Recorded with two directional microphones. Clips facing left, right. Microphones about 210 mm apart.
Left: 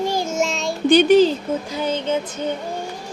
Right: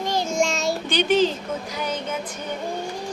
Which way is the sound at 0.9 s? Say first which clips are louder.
Left 9 dB; 45° left (ahead or behind).